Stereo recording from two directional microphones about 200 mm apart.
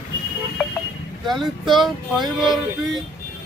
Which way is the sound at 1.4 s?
Centre (ahead or behind).